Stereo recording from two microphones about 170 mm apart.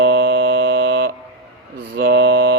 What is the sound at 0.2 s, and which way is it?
Mantra, 60° right (ahead or behind).